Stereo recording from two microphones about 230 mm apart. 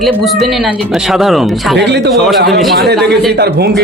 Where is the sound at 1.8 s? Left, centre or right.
Right.